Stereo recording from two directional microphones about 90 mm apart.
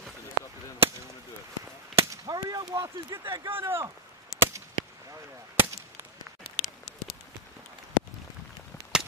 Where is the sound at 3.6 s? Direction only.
25° right (ahead or behind).